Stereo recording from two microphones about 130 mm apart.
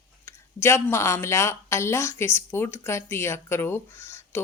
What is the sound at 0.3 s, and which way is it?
A woman's voice, 20° left (ahead or behind).